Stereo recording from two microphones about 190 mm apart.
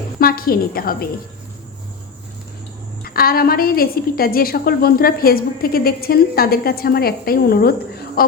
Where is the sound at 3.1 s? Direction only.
50° left (ahead or behind).